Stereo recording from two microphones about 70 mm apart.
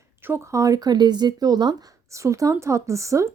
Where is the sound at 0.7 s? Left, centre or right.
Right.